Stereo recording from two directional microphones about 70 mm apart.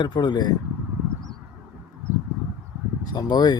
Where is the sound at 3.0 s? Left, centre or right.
Left.